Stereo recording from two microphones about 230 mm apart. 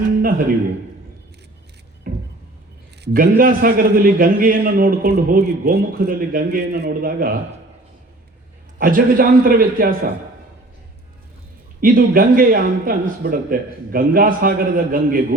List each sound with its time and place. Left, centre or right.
0.2 s a sound: right
3.0 s a man's voice: right
8.8 s a man's voice: right
11.8 s a man's voice: right